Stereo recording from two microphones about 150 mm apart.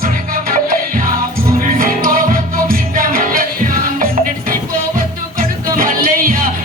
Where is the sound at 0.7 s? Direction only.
70° right (ahead or behind).